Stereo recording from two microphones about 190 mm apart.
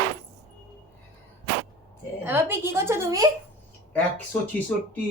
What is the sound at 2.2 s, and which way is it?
A woman's voice, 10° right (ahead or behind).